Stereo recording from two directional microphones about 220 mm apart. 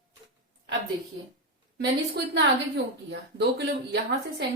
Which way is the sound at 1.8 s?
50° right (ahead or behind).